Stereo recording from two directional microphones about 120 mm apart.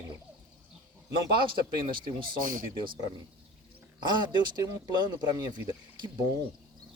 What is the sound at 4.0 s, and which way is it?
Speech, 40° right (ahead or behind).